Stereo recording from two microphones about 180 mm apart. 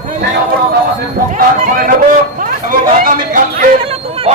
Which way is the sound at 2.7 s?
50° right (ahead or behind).